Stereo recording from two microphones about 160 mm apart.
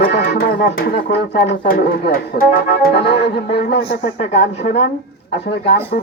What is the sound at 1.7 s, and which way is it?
Speech, 70° left (ahead or behind).